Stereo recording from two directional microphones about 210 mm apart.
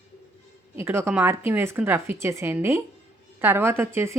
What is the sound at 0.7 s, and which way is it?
A woman's voice, 10° right (ahead or behind).